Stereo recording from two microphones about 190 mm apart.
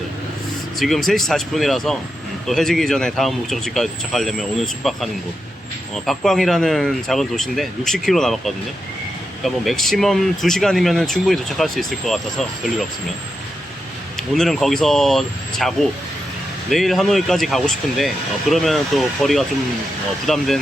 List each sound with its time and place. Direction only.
0.8 s speech: centre (ahead or behind)
6.1 s speech: centre (ahead or behind)
14.2 s speech: centre (ahead or behind)